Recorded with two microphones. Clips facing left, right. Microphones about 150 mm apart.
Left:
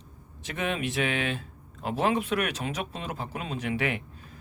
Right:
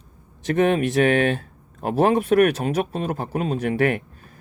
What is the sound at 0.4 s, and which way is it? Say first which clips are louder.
A man's voice: right 12 dB; 50° right (ahead or behind).